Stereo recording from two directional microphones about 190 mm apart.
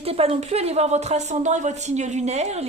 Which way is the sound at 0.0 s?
30° right (ahead or behind).